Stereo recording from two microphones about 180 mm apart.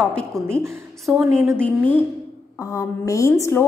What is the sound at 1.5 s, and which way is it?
A woman's voice, 10° left (ahead or behind).